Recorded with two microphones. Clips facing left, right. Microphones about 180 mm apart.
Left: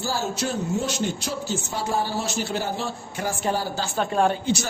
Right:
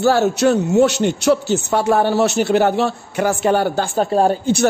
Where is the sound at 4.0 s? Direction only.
40° right (ahead or behind).